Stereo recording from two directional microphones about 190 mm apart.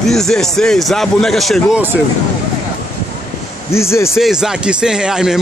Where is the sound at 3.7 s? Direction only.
15° left (ahead or behind).